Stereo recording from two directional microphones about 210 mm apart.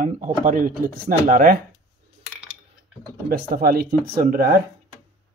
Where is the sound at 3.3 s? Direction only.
45° right (ahead or behind).